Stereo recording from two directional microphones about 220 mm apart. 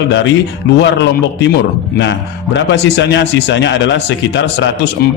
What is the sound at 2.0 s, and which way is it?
Speech, 50° left (ahead or behind).